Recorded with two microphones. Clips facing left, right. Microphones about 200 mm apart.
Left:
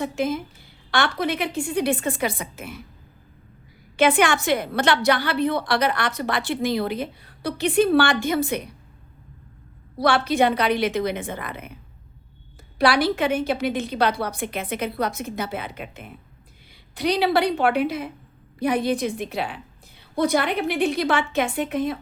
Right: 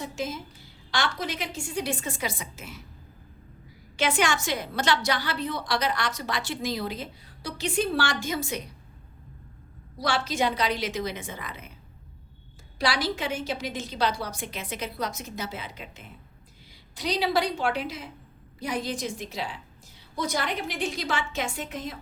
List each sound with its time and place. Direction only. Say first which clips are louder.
0.0 s a woman's voice: left 8 dB; 60° left (ahead or behind)
3.9 s a woman's voice: left 7 dB; 55° left (ahead or behind)
10.0 s a woman's voice: left 7 dB; 60° left (ahead or behind)
12.8 s a woman's voice: left 8 dB; 60° left (ahead or behind)